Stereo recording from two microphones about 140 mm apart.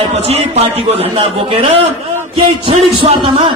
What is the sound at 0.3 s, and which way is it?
A man's voice, 50° right (ahead or behind).